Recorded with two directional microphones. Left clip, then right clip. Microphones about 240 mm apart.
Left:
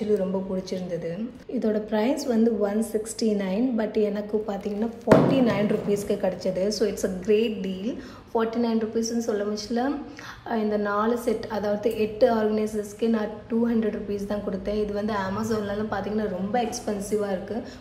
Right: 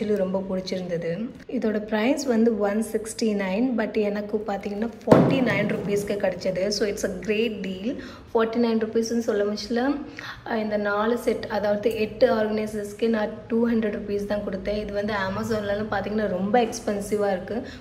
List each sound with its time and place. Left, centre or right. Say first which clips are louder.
0.1 s a woman's voice: left 1 dB; centre